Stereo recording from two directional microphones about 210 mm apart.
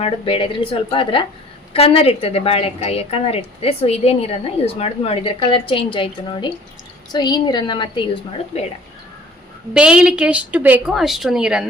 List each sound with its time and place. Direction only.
0.0 s a woman's voice: 25° left (ahead or behind)
9.7 s a woman's voice: 5° right (ahead or behind)